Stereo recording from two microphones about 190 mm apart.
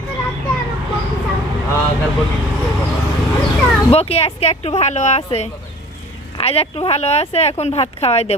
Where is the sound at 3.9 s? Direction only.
30° left (ahead or behind).